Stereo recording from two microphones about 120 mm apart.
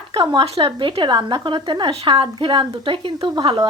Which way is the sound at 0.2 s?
45° right (ahead or behind).